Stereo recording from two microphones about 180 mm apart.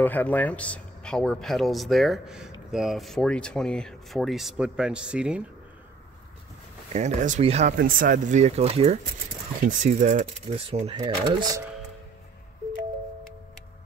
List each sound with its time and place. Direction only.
0.0 s speech: 10° left (ahead or behind); by 5.4 s 5° right (ahead or behind)
6.9 s speech: 40° right (ahead or behind)
7.7 s speech: 50° right (ahead or behind); by 11.6 s 25° right (ahead or behind)